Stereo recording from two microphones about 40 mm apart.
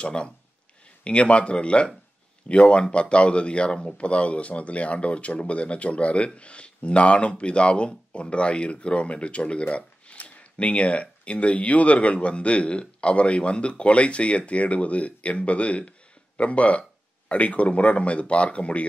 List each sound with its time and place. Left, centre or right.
0.0 s speech: left